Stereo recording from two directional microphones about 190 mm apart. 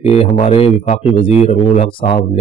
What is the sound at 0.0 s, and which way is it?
A man's voice, 30° left (ahead or behind).